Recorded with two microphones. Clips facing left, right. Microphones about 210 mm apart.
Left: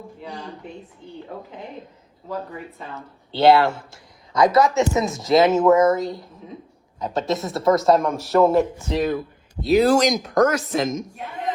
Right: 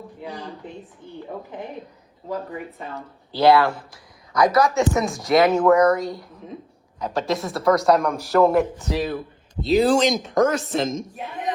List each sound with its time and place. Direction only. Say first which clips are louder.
3.3 s speech: left 1 dB; 25° left (ahead or behind)
4.8 s speech: even; centre (ahead or behind)
5.3 s speech: left 1 dB; 20° left (ahead or behind)
5.9 s speech: even; centre (ahead or behind)
7.0 s speech: even; 25° left (ahead or behind)
8.1 s speech: left 1 dB; centre (ahead or behind)